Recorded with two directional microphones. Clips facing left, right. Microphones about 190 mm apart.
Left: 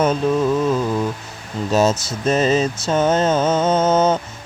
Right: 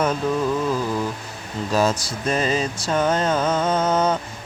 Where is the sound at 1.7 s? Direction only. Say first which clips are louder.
Left 4 dB; 25° left (ahead or behind).